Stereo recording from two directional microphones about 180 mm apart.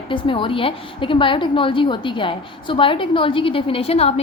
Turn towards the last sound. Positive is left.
turn(degrees=35)  # may be behind; listen again after turning